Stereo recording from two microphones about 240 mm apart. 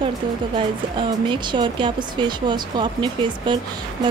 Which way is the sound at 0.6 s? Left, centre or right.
Centre.